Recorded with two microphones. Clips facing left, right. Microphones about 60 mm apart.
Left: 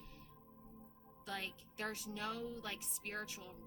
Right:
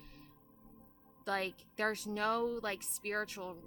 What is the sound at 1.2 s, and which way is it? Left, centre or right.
Speech, right.